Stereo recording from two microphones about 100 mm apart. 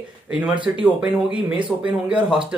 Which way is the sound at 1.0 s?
10° right (ahead or behind).